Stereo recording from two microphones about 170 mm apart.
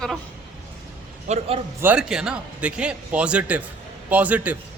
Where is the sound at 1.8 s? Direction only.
5° right (ahead or behind).